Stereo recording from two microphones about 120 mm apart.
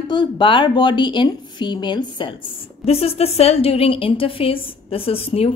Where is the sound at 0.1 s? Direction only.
40° left (ahead or behind).